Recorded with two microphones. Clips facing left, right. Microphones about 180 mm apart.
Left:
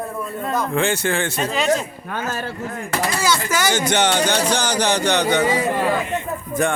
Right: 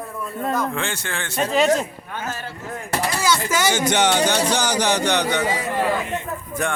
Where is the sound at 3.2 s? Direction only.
20° right (ahead or behind).